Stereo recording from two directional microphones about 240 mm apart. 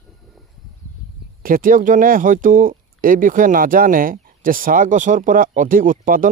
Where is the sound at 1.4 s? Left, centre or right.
Right.